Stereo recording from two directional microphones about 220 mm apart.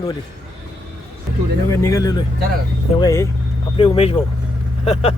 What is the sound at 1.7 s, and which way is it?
Speech, 15° left (ahead or behind).